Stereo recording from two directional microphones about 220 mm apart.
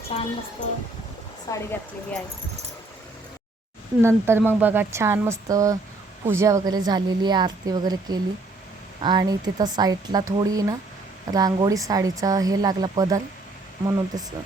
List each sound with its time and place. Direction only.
0.1 s speech: 25° left (ahead or behind)
1.5 s speech: 15° left (ahead or behind)
4.0 s a woman's voice: 10° right (ahead or behind)